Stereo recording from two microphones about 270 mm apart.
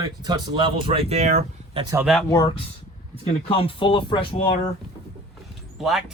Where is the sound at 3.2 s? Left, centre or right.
Left.